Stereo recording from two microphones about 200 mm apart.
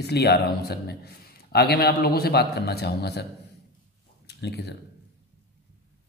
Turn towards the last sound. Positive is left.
turn(degrees=55)  # may be behind; listen again after turning